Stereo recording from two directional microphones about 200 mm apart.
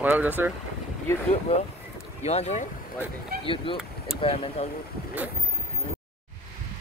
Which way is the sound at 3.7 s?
25° left (ahead or behind).